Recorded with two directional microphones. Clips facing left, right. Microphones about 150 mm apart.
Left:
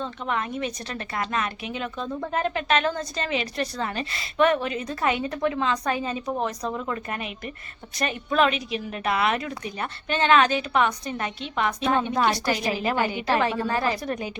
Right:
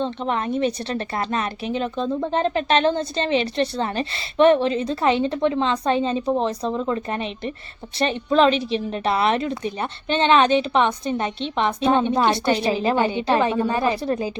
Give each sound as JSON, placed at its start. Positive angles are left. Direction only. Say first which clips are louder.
{"t": 0.0, "sound": "a woman's voice", "louder": "right 5 dB", "side_deg": -30}